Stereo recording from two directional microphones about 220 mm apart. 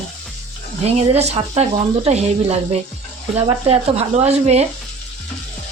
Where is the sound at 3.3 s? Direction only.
25° right (ahead or behind).